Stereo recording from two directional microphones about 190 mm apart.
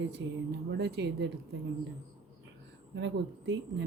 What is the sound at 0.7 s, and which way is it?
Speech, 60° right (ahead or behind).